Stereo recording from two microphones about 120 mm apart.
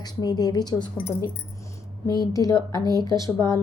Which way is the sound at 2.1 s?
30° left (ahead or behind).